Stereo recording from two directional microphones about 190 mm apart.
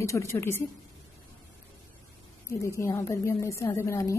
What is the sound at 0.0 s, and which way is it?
Speech, 15° left (ahead or behind).